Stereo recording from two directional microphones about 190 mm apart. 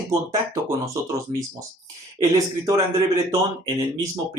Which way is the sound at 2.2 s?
20° right (ahead or behind).